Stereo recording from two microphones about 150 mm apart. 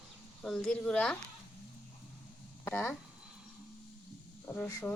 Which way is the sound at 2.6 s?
15° left (ahead or behind).